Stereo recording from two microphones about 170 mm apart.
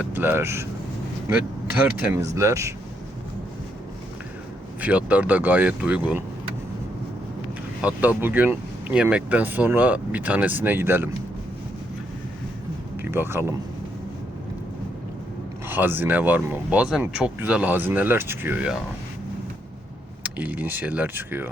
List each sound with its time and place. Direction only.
0.0 s speech: 10° right (ahead or behind)
4.8 s speech: 10° right (ahead or behind)
7.8 s speech: 5° right (ahead or behind)
13.0 s speech: 15° right (ahead or behind)
15.7 s speech: 10° right (ahead or behind)
20.2 s speech: 10° right (ahead or behind)